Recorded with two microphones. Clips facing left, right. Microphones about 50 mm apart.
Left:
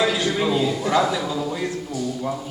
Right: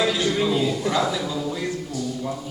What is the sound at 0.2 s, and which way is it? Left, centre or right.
A man's voice, centre.